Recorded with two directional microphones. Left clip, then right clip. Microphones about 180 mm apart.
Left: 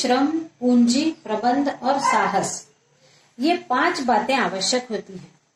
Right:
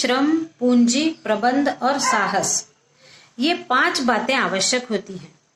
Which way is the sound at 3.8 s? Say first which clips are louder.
Even; 30° right (ahead or behind).